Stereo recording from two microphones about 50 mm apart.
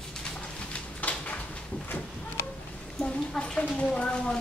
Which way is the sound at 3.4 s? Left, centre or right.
Centre.